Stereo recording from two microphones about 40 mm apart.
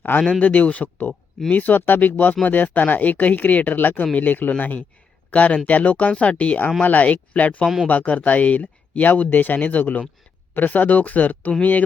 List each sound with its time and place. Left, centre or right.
0.3 s speech: left